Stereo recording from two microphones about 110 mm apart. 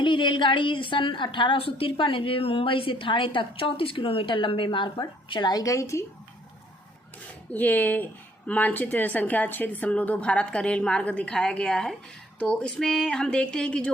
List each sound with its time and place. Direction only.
0.0 s a woman's voice: 50° left (ahead or behind); by 6.1 s 25° left (ahead or behind)
7.5 s a woman's voice: 15° left (ahead or behind)